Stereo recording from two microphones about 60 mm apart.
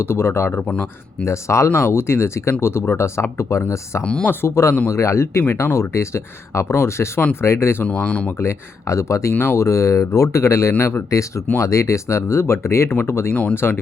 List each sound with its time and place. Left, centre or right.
0.0 s speech: left
3.5 s speech: left
4.0 s speech: centre
4.3 s speech: left
7.9 s speech: left
8.4 s speech: left
10.4 s speech: left
11.1 s speech: left